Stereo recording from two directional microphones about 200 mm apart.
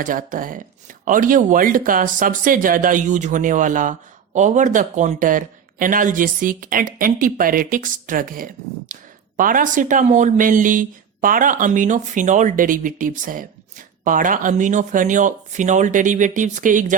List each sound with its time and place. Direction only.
0.0 s speech: 40° right (ahead or behind)